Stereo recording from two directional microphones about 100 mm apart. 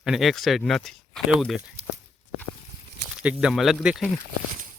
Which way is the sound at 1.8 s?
85° right.